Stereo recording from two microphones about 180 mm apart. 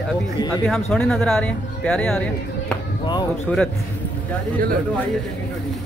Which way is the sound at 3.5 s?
5° left (ahead or behind).